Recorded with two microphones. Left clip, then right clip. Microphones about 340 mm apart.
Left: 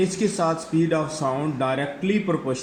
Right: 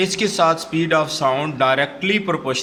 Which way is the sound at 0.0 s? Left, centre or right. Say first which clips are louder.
Right 6 dB; right.